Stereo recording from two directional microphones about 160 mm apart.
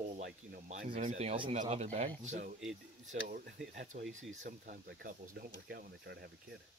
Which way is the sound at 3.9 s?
50° right (ahead or behind).